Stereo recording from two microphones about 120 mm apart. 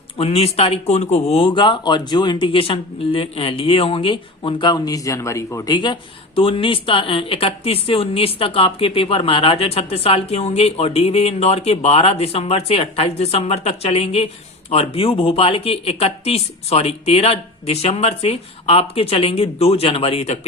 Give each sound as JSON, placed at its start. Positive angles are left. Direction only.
{"t": 0.2, "sound": "speech", "side_deg": 55}
{"t": 5.6, "sound": "speech", "side_deg": 40}